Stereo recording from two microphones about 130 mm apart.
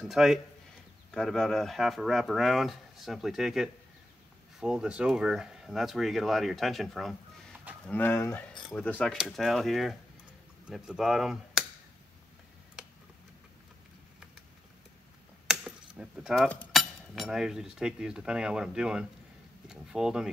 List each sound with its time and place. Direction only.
0.0 s speech: centre (ahead or behind)
7.8 s speech: 15° left (ahead or behind); by 11.6 s centre (ahead or behind)
15.4 s a sound: 5° right (ahead or behind)
16.7 s speech: centre (ahead or behind)